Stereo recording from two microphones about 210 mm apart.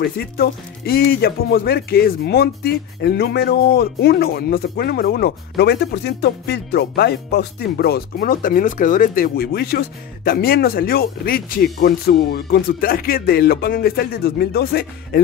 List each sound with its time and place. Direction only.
0.0 s speech: 50° left (ahead or behind)